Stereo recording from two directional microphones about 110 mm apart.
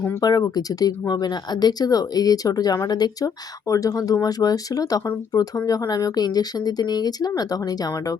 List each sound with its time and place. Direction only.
0.2 s speech: 35° left (ahead or behind)